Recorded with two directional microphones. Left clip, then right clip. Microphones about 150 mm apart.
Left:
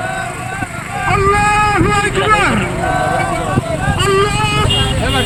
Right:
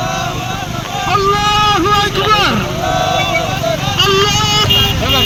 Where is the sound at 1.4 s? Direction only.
20° right (ahead or behind).